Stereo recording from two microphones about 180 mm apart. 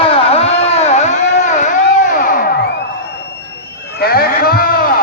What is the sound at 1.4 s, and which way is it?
Music, 40° left (ahead or behind).